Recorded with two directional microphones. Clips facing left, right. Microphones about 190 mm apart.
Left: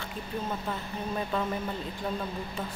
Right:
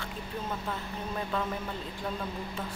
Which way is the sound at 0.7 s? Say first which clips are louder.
Left 2 dB; 5° left (ahead or behind).